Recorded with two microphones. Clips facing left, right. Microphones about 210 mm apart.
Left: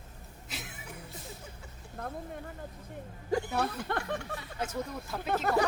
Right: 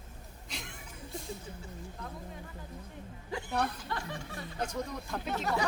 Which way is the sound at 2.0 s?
60° left (ahead or behind).